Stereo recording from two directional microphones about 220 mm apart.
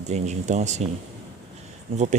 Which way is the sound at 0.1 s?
30° right (ahead or behind).